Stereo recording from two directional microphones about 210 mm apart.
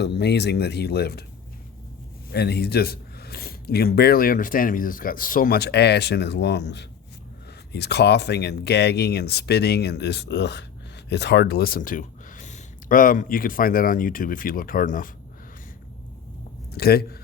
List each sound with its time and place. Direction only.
0.0 s speech: 55° left (ahead or behind)
2.3 s speech: 50° left (ahead or behind)
16.7 s speech: 50° left (ahead or behind)